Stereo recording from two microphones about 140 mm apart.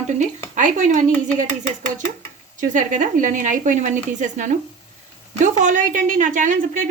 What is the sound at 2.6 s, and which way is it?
A woman's voice, 65° right (ahead or behind).